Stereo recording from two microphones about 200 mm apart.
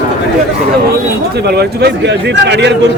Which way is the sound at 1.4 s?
55° right (ahead or behind).